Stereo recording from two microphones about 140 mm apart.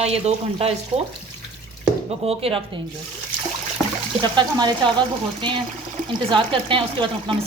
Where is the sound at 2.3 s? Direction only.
45° right (ahead or behind).